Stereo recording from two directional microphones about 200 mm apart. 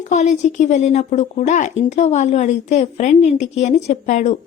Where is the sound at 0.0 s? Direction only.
35° left (ahead or behind).